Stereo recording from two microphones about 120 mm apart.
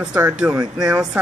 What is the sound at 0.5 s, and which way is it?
Speech, 30° right (ahead or behind).